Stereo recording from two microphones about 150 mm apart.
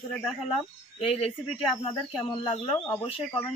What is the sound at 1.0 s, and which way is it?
Speech, 40° left (ahead or behind).